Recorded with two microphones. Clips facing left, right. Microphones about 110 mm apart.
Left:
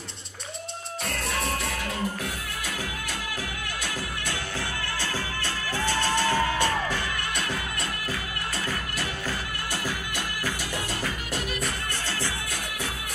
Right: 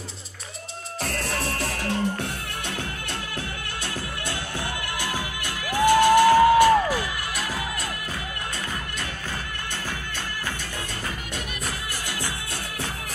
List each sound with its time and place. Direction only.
1.0 s music: centre (ahead or behind)
1.6 s music: 30° right (ahead or behind)
5.7 s music: 15° right (ahead or behind)